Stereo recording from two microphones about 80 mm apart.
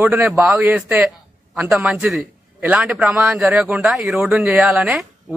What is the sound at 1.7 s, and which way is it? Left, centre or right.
Speech, centre.